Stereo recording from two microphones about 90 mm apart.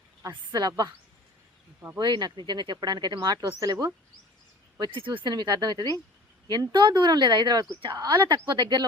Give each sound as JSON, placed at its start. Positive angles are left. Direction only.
{"t": 0.3, "sound": "speech", "side_deg": -50}
{"t": 2.0, "sound": "speech", "side_deg": -55}
{"t": 4.8, "sound": "speech", "side_deg": -70}
{"t": 8.4, "sound": "speech", "side_deg": -60}